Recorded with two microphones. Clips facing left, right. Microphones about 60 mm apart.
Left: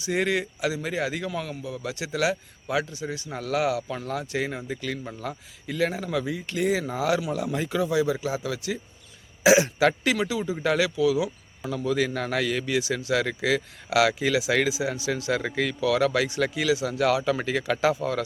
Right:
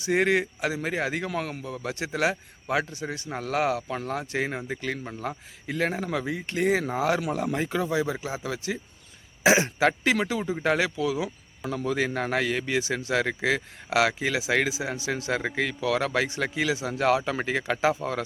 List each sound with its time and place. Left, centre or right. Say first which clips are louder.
0.0 s a man's voice: right 2 dB; right
3.3 s a man's voice: left 1 dB; right
10.2 s a man's voice: even; right